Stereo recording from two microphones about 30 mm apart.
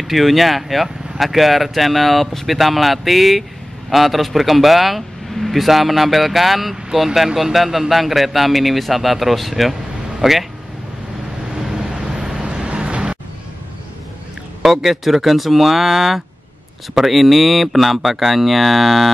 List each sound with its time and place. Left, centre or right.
0.0 s speech: centre
12.2 s vehicle: right
12.5 s vehicle: right
14.7 s speech: centre